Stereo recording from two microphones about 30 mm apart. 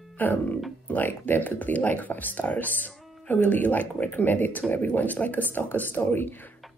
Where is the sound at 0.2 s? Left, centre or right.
Left.